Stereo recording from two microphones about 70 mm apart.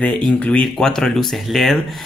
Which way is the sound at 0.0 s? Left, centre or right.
Centre.